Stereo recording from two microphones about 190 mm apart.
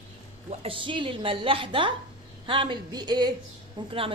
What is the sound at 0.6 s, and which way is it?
A woman's voice, 30° right (ahead or behind).